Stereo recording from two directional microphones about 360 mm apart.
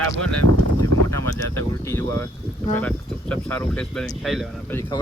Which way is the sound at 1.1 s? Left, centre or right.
Centre.